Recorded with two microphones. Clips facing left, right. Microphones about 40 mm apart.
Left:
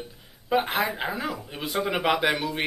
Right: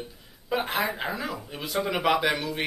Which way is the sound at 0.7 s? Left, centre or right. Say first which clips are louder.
Left 1 dB; centre.